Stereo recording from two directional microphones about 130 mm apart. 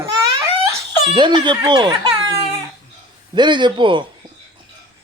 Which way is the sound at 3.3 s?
35° right (ahead or behind).